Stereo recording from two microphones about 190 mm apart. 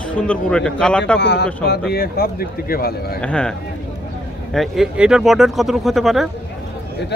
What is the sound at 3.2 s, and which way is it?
A man's voice, 5° left (ahead or behind).